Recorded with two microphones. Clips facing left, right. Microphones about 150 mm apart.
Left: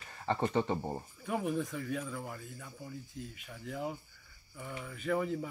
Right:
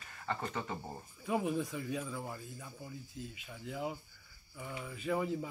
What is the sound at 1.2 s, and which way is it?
Speech, 15° right (ahead or behind).